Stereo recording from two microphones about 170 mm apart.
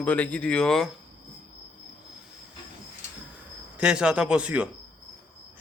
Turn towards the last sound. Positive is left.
turn(degrees=-5)  # may be behind; listen again after turning